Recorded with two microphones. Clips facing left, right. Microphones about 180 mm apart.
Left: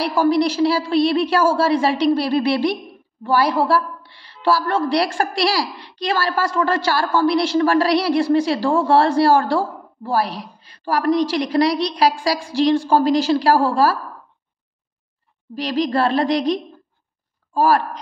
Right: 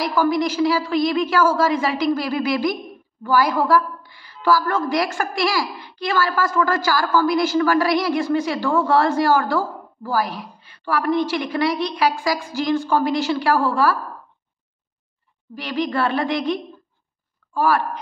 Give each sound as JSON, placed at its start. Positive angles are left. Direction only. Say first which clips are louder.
{"t": 0.0, "sound": "a woman's voice", "louder": "left 3 dB", "side_deg": 30}
{"t": 15.5, "sound": "a woman's voice", "louder": "left 3 dB", "side_deg": 35}